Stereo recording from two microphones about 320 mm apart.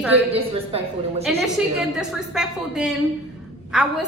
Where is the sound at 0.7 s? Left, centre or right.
Centre.